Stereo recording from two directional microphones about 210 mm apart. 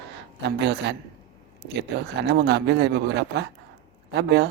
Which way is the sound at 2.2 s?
50° right (ahead or behind).